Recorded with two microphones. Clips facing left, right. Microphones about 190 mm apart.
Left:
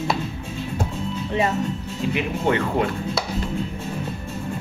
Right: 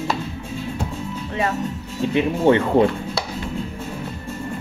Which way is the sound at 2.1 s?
30° right (ahead or behind).